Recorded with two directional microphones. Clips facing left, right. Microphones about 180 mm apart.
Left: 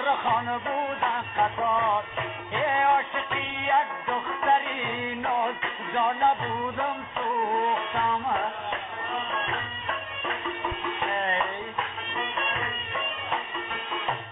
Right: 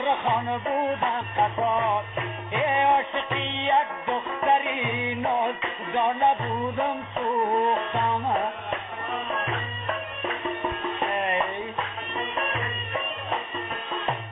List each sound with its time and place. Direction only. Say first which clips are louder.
2.5 s music: right 2 dB; 15° right (ahead or behind)
3.4 s music: right 1 dB; 25° right (ahead or behind)
4.5 s music: right 2 dB; 15° right (ahead or behind)
7.2 s music: right 3 dB; centre (ahead or behind)
11.1 s music: right 2 dB; 15° right (ahead or behind)